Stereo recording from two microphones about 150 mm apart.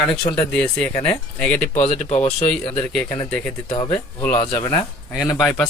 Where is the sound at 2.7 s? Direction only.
5° left (ahead or behind).